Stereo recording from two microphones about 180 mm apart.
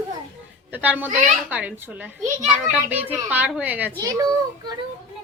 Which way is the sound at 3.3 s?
10° right (ahead or behind).